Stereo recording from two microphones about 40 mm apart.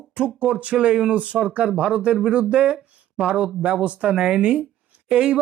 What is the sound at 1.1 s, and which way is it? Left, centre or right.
Speech, right.